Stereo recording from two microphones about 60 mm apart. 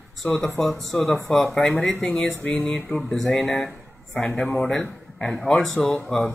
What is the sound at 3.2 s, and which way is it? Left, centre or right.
Speech, centre.